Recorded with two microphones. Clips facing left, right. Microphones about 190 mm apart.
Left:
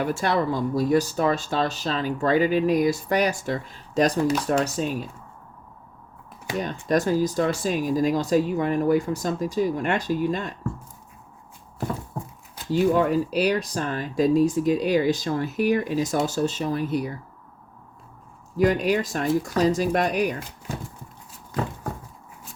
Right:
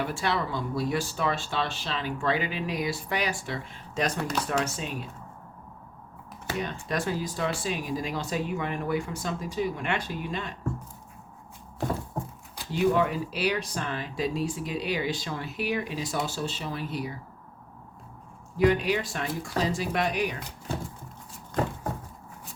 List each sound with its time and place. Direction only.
0.0 s speech: 45° left (ahead or behind)
6.6 s speech: 40° left (ahead or behind)
12.7 s speech: 40° left (ahead or behind)
18.5 s speech: 40° left (ahead or behind)